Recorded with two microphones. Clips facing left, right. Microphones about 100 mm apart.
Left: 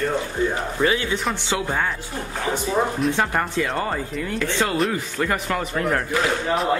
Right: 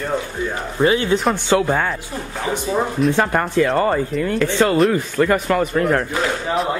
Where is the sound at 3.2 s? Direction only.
55° right (ahead or behind).